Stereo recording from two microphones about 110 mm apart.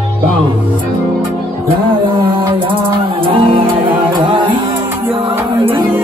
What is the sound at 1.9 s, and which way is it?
Music, 50° right (ahead or behind).